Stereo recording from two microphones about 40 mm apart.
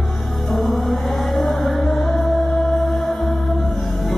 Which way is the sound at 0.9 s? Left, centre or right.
Centre.